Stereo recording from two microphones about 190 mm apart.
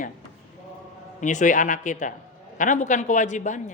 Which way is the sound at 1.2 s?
40° left (ahead or behind).